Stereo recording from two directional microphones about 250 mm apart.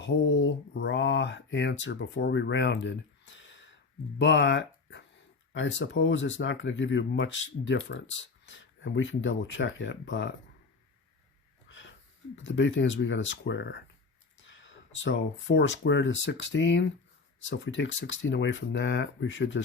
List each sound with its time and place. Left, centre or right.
0.0 s speech: left
11.7 s a sound: left
12.4 s speech: left